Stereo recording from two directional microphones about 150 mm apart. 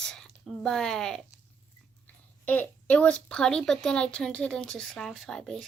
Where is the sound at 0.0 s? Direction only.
5° left (ahead or behind).